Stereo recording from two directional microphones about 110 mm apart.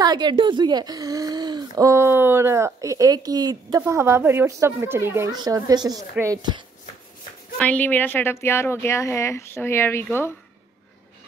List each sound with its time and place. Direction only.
0.0 s speech: 40° right (ahead or behind)
3.8 s a child's voice: 25° right (ahead or behind)
5.3 s speech: 35° right (ahead or behind)
7.6 s speech: 15° left (ahead or behind)